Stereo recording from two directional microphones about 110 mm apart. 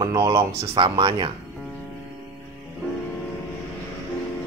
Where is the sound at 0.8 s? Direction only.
45° right (ahead or behind).